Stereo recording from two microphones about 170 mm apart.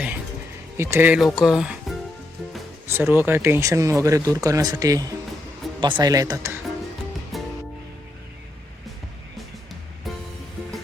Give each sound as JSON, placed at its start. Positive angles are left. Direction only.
{"t": 0.8, "sound": "speech", "side_deg": -15}
{"t": 7.3, "sound": "music", "side_deg": 0}